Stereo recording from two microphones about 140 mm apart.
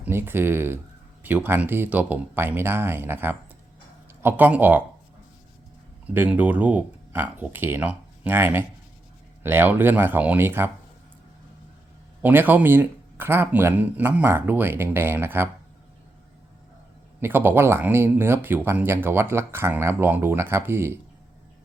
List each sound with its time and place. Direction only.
0.0 s speech: 15° right (ahead or behind)
6.1 s speech: 10° right (ahead or behind)
12.2 s speech: 15° right (ahead or behind)
17.2 s speech: 15° right (ahead or behind)